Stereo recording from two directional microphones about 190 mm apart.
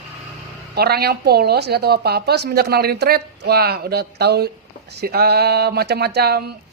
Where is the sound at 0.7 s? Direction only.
55° right (ahead or behind).